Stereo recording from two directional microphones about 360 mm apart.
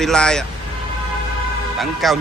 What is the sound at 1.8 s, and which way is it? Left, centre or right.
Speech, centre.